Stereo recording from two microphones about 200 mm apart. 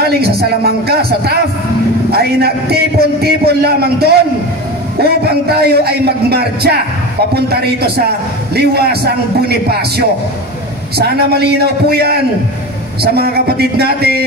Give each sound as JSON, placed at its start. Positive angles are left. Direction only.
{"t": 0.0, "sound": "a man's voice", "side_deg": -50}